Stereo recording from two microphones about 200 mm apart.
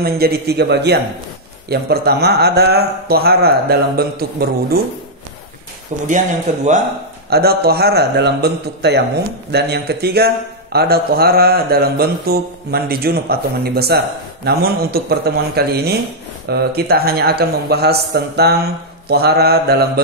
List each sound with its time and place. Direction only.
0.0 s a man's voice: 50° right (ahead or behind)
6.0 s speech: 40° right (ahead or behind)
7.2 s a man's voice: 50° right (ahead or behind)